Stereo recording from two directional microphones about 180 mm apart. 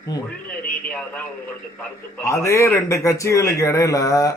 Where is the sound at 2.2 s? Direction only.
15° left (ahead or behind).